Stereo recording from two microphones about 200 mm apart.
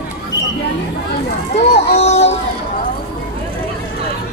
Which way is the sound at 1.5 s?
35° left (ahead or behind).